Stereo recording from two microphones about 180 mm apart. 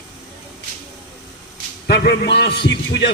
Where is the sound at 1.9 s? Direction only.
65° left (ahead or behind).